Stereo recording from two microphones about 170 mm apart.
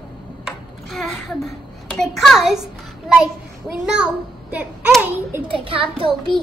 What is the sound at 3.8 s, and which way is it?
A child's voice, 5° right (ahead or behind).